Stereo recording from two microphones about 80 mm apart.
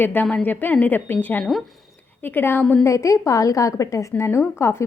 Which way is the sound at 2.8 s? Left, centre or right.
Left.